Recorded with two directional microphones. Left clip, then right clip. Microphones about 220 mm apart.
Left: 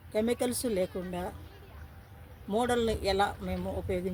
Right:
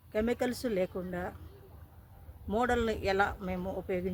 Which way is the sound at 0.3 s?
25° right (ahead or behind).